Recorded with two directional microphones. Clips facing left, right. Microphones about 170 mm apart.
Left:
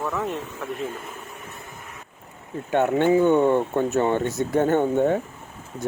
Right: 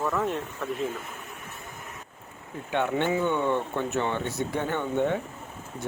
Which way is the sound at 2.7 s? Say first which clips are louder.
Left 7 dB; 45° left (ahead or behind).